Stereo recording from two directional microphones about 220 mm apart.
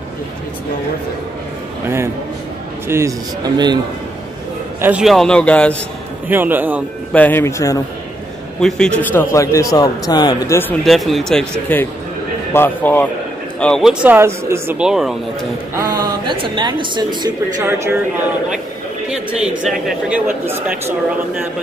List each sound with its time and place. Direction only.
2.9 s speech: 15° right (ahead or behind)
4.8 s speech: 5° right (ahead or behind)
6.2 s speech: 10° right (ahead or behind)
7.1 s a man's voice: 5° left (ahead or behind)
8.5 s a man's voice: 5° left (ahead or behind)
10.9 s a man's voice: centre (ahead or behind)
15.7 s speech: 15° right (ahead or behind)
19.0 s speech: 5° right (ahead or behind)